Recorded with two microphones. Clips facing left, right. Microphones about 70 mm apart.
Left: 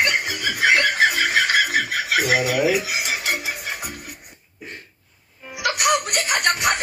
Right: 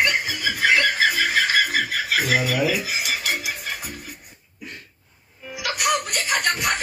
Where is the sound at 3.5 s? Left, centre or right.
Centre.